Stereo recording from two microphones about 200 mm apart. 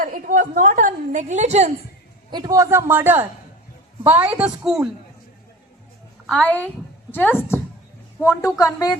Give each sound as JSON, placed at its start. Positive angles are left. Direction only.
{"t": 0.0, "sound": "a woman's voice", "side_deg": -40}
{"t": 2.3, "sound": "a man's voice", "side_deg": -20}
{"t": 6.2, "sound": "a woman's voice", "side_deg": 5}